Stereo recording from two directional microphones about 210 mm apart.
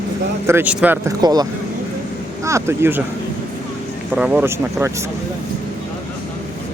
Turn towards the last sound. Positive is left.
turn(degrees=-10)  # may be behind; listen again after turning